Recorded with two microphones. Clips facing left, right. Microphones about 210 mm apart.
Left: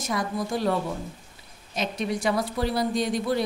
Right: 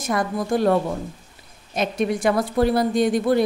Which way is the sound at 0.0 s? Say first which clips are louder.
Right 4 dB; 50° right (ahead or behind).